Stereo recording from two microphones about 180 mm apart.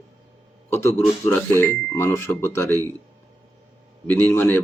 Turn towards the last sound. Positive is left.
turn(degrees=15)  # may be behind; listen again after turning